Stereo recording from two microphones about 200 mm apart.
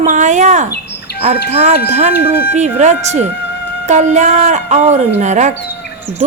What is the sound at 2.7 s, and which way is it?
Speech, 35° right (ahead or behind).